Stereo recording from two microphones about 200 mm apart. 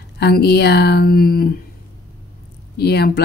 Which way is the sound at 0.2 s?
55° left (ahead or behind).